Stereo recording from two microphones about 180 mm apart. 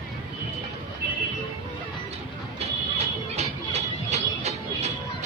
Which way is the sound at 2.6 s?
35° right (ahead or behind).